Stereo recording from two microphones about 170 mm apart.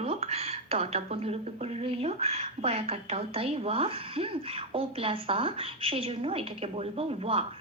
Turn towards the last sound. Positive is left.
turn(degrees=-35)  # may be behind; listen again after turning